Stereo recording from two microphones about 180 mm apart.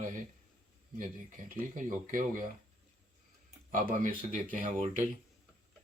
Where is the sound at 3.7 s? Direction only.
50° right (ahead or behind).